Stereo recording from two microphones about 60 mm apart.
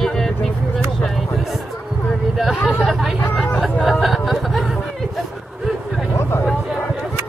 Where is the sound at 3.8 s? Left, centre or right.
Centre.